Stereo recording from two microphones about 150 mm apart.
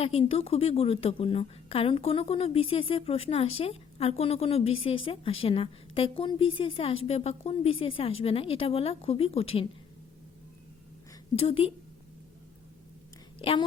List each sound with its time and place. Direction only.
0.0 s a woman's voice: 40° left (ahead or behind)
11.3 s a woman's voice: 40° left (ahead or behind)
13.4 s a woman's voice: 35° left (ahead or behind)